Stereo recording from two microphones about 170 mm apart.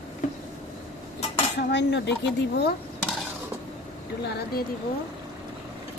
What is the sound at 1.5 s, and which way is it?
Cutlery, 90° left.